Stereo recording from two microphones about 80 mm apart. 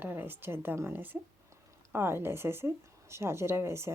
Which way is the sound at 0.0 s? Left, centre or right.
Right.